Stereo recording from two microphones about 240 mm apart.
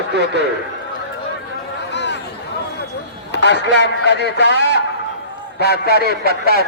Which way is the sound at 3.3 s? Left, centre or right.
Left.